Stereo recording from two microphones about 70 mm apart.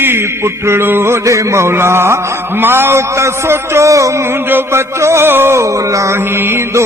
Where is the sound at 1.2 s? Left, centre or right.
Right.